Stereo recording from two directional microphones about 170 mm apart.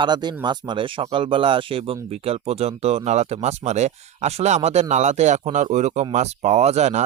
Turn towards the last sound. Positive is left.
turn(degrees=-40)  # may be behind; listen again after turning